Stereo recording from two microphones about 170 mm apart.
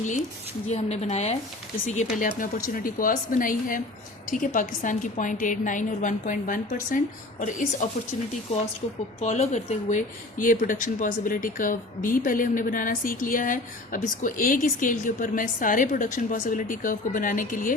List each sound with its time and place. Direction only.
0.7 s a woman's voice: 40° left (ahead or behind)
9.2 s speech: 40° left (ahead or behind)